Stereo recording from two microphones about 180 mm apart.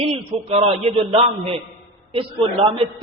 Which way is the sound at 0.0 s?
35° right (ahead or behind).